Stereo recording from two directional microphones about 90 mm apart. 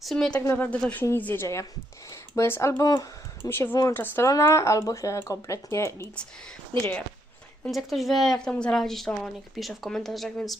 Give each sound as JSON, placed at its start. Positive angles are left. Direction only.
{"t": 0.0, "sound": "speech", "side_deg": 5}
{"t": 0.3, "sound": "a woman's voice", "side_deg": 20}
{"t": 2.0, "sound": "speech", "side_deg": 30}
{"t": 3.5, "sound": "a woman's voice", "side_deg": 25}
{"t": 4.3, "sound": "speech", "side_deg": 35}
{"t": 7.7, "sound": "speech", "side_deg": 0}